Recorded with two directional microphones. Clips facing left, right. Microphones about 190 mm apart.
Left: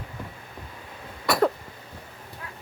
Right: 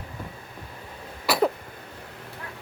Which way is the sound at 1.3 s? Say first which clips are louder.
Left 1 dB; 5° right (ahead or behind).